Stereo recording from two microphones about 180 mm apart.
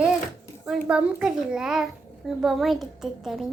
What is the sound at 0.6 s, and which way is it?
A child's voice, 5° right (ahead or behind).